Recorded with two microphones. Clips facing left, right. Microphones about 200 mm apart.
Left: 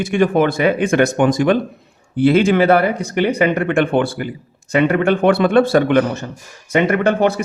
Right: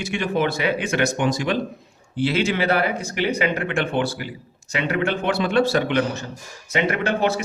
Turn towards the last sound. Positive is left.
turn(degrees=55)  # may be behind; listen again after turning